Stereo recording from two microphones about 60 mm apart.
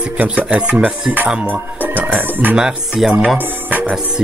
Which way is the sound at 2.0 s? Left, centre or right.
Right.